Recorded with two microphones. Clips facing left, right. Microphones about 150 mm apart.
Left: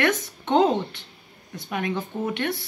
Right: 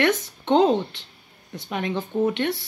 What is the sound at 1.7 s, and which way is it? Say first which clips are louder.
Speech: right 1 dB; 25° right (ahead or behind).